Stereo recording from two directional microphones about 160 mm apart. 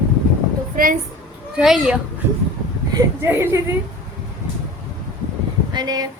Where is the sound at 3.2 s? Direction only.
15° right (ahead or behind).